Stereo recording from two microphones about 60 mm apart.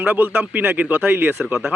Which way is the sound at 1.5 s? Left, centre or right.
Centre.